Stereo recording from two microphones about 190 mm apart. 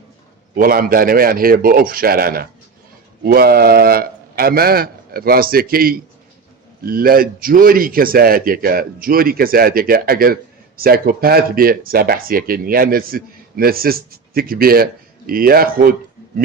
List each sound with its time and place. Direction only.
0.5 s speech: 50° right (ahead or behind)